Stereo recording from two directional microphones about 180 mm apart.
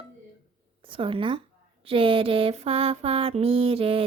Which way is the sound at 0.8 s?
30° right (ahead or behind).